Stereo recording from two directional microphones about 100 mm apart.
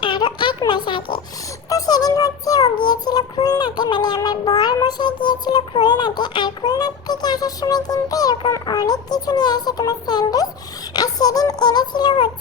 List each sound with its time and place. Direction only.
0.0 s a sound: 50° left (ahead or behind)
0.7 s speech: 50° left (ahead or behind)
1.7 s music: 40° left (ahead or behind)
8.6 s a child's voice: 40° left (ahead or behind)